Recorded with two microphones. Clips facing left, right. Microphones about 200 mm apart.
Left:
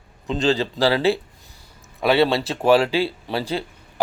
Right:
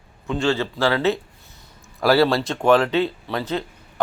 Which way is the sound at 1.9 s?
Centre (ahead or behind).